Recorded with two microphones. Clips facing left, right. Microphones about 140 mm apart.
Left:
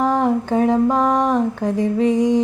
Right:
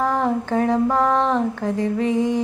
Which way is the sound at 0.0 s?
20° left (ahead or behind).